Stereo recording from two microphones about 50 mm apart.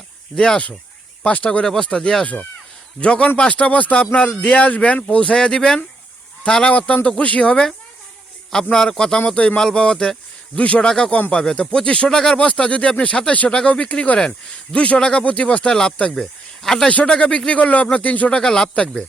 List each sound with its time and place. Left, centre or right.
0.3 s speech: centre
1.2 s speech: left
1.6 s speech: centre
2.2 s speech: left
4.4 s a man's voice: left
9.6 s speech: centre
9.8 s a sound: centre
10.6 s speech: left
10.8 s speech: centre
12.4 s speech: left
16.6 s speech: centre
16.9 s speech: left
18.3 s speech: centre